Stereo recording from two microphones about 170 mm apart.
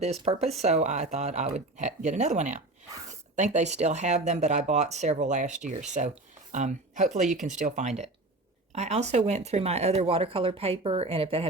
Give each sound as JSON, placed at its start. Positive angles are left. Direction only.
{"t": 0.0, "sound": "speech", "side_deg": -40}
{"t": 7.3, "sound": "speech", "side_deg": 0}
{"t": 7.6, "sound": "speech", "side_deg": -45}